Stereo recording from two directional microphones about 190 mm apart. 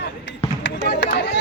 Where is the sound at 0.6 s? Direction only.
65° left (ahead or behind).